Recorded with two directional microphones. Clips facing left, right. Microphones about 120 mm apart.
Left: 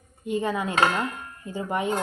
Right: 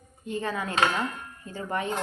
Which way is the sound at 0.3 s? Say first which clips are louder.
Left 4 dB; 15° left (ahead or behind).